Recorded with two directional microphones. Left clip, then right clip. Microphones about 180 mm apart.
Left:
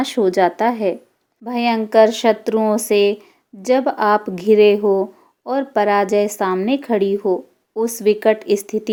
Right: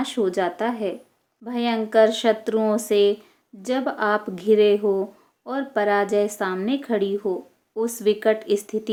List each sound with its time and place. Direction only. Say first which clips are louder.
0.0 s speech: left 7 dB; 35° left (ahead or behind)